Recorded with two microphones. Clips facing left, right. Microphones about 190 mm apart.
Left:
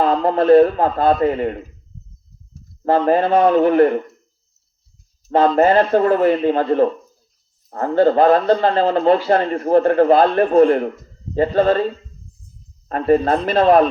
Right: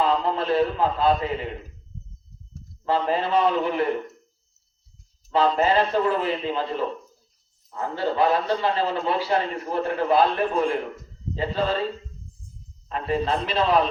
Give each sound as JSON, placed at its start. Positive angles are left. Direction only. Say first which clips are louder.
{"t": 0.0, "sound": "a man's voice", "louder": "left 7 dB", "side_deg": 50}
{"t": 2.8, "sound": "a man's voice", "louder": "left 8 dB", "side_deg": 55}
{"t": 5.3, "sound": "a man's voice", "louder": "left 7 dB", "side_deg": 50}
{"t": 12.9, "sound": "a man's voice", "louder": "left 9 dB", "side_deg": 50}